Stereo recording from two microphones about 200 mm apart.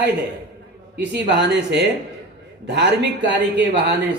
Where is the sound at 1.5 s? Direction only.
60° right (ahead or behind).